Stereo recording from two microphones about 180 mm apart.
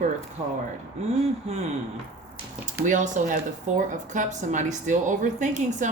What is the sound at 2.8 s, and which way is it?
A woman's voice, 45° right (ahead or behind).